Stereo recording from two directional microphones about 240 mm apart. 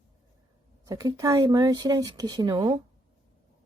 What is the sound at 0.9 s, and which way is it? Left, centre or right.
Speech, centre.